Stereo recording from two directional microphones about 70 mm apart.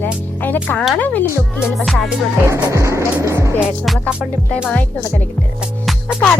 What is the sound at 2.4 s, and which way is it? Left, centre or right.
Speech, right.